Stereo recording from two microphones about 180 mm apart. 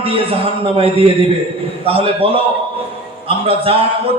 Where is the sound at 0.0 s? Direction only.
30° right (ahead or behind).